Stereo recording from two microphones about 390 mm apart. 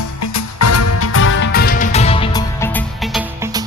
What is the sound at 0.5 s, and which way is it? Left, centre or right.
Music, left.